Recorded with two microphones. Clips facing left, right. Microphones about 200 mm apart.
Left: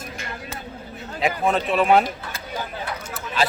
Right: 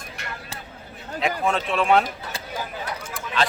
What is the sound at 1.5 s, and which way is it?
Speech, 5° left (ahead or behind).